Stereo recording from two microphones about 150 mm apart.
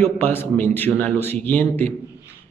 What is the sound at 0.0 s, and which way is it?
A man's voice, 15° left (ahead or behind).